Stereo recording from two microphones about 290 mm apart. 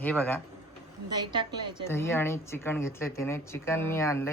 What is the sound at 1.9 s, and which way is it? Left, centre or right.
Speech, centre.